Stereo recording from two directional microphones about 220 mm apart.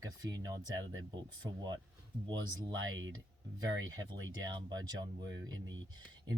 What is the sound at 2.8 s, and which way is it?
Speech, 60° right (ahead or behind).